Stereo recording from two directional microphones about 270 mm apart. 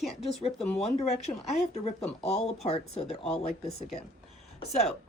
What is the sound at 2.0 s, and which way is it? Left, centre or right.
Speech, centre.